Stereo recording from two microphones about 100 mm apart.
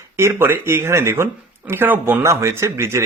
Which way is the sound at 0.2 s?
25° right (ahead or behind).